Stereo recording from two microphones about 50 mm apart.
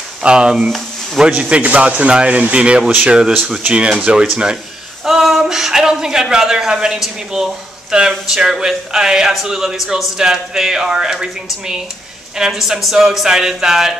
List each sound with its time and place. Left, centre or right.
0.2 s speech: centre
0.7 s a sound: centre
1.5 s speech: right
3.4 s speech: centre
5.0 s speech: centre
12.4 s speech: centre